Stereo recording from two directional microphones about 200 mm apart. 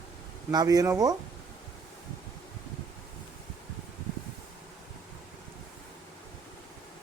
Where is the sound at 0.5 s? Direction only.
20° right (ahead or behind).